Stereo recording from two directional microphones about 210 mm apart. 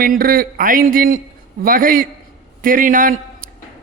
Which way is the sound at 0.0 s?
45° right (ahead or behind).